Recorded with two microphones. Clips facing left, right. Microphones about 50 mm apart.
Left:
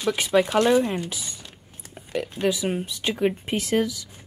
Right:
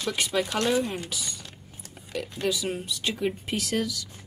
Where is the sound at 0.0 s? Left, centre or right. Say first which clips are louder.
Left 6 dB; centre.